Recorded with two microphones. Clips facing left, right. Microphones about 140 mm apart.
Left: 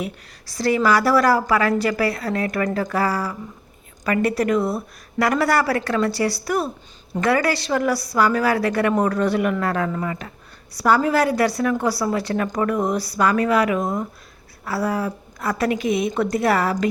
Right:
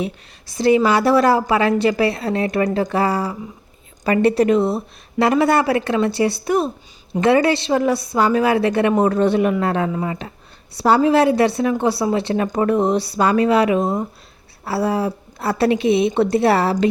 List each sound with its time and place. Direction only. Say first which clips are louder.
0.0 s a woman's voice: right 4 dB; 20° right (ahead or behind)